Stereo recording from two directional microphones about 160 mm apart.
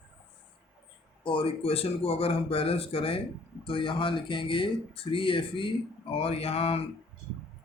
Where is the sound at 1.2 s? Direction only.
35° left (ahead or behind).